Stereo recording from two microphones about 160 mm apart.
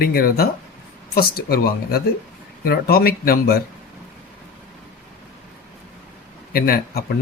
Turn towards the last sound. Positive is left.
turn(degrees=70)  # may be behind; listen again after turning